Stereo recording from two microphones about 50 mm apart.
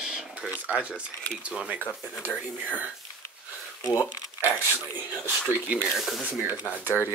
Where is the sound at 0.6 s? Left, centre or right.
Right.